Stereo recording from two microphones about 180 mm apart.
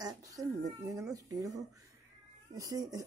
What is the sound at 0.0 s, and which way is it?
Speech, 20° right (ahead or behind).